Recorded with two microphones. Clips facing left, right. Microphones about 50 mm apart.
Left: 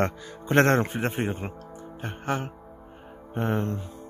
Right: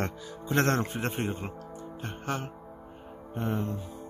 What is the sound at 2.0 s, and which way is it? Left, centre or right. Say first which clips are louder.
Music: left 5 dB; left.